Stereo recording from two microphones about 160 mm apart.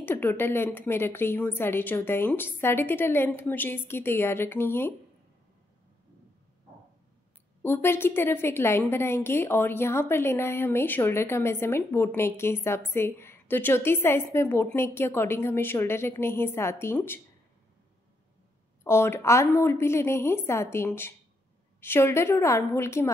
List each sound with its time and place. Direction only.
0.0 s a woman's voice: 15° left (ahead or behind)
7.6 s a woman's voice: 15° left (ahead or behind)
18.9 s a woman's voice: 15° left (ahead or behind)